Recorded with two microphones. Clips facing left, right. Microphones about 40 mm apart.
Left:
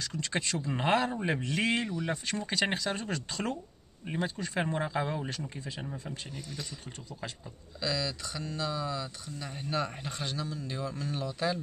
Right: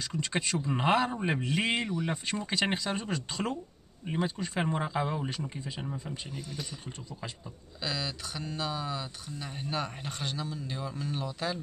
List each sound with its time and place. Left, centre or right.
0.1 s speech: centre
6.3 s speech: centre
7.8 s speech: right; by 11.6 s centre